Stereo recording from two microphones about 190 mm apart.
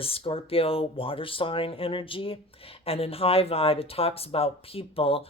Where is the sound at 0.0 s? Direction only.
30° left (ahead or behind).